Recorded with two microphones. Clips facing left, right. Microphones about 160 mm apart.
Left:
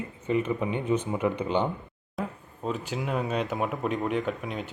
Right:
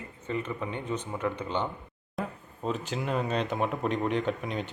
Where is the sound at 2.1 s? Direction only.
Centre (ahead or behind).